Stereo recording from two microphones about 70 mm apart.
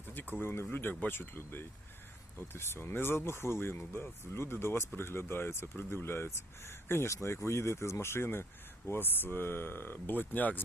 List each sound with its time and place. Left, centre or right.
0.1 s speech: left